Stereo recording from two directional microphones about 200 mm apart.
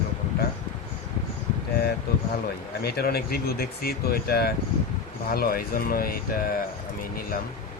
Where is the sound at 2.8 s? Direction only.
50° left (ahead or behind).